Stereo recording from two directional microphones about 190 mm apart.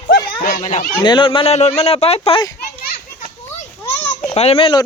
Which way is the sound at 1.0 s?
25° left (ahead or behind).